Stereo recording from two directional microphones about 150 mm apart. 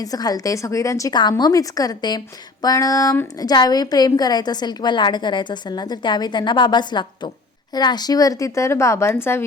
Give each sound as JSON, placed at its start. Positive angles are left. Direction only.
{"t": 0.0, "sound": "a woman's voice", "side_deg": 25}